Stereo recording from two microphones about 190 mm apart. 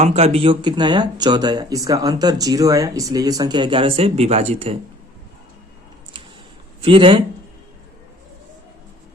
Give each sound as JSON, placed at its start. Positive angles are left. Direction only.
{"t": 0.0, "sound": "speech", "side_deg": -35}
{"t": 6.8, "sound": "speech", "side_deg": -30}